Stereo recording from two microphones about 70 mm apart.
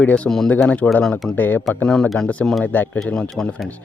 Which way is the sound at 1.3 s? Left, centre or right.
Left.